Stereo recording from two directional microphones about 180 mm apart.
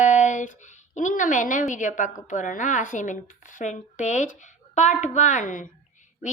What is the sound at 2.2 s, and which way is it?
A woman's voice, 45° left (ahead or behind).